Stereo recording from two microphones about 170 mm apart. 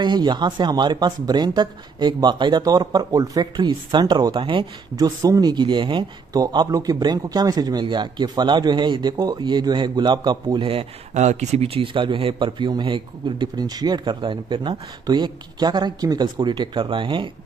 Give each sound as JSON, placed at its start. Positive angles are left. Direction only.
{"t": 0.0, "sound": "speech", "side_deg": -25}